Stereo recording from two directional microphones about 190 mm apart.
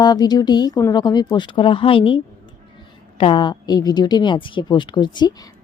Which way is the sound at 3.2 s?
25° left (ahead or behind).